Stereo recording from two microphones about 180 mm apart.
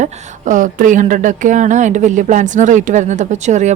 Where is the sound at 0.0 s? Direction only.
45° right (ahead or behind).